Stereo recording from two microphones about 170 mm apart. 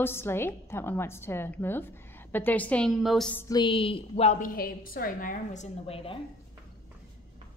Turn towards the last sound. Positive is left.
turn(degrees=35)  # may be behind; listen again after turning